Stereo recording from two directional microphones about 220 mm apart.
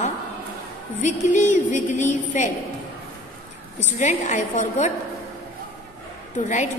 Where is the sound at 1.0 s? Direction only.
35° left (ahead or behind).